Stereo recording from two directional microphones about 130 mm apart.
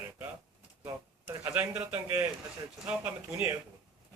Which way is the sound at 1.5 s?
15° right (ahead or behind).